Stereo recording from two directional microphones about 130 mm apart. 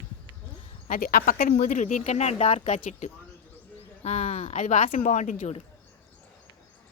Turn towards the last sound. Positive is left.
turn(degrees=70)  # may be behind; listen again after turning